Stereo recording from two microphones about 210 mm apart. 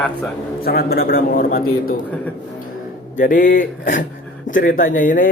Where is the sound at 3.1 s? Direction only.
40° left (ahead or behind).